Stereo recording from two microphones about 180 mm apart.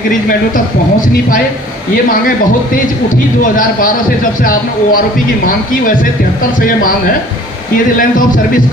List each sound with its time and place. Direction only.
2.0 s a man's voice: 50° left (ahead or behind)